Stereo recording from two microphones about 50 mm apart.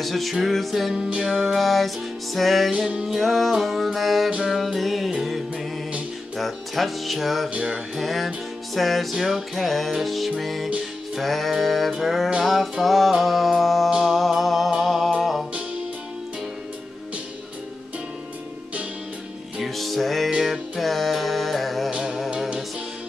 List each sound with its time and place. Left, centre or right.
0.0 s music: centre
0.9 s music: centre
1.3 s music: centre
2.9 s music: centre
3.2 s music: centre
6.3 s music: centre
19.6 s music: centre